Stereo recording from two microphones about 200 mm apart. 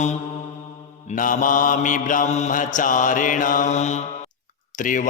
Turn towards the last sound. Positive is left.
turn(degrees=40)  # may be behind; listen again after turning